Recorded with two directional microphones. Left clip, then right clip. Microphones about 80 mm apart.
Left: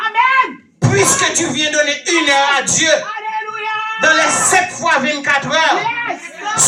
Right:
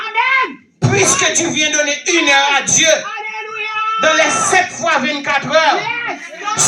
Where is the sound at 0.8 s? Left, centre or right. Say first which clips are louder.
Even; left.